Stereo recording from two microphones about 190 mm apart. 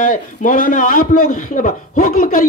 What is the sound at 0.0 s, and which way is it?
Speech, 45° left (ahead or behind).